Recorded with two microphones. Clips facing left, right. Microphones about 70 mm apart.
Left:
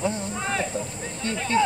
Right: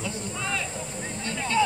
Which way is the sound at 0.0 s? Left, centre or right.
Left.